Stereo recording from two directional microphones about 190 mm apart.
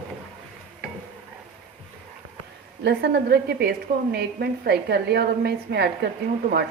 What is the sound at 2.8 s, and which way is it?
A woman's voice, 60° right (ahead or behind).